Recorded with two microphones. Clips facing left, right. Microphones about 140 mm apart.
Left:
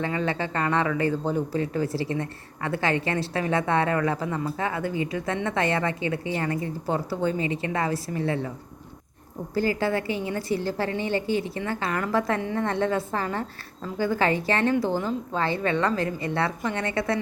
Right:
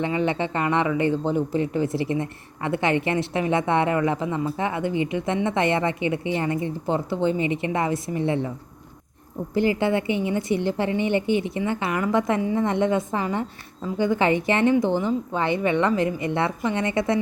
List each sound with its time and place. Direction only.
0.0 s a woman's voice: 20° right (ahead or behind)
9.6 s a woman's voice: 20° right (ahead or behind)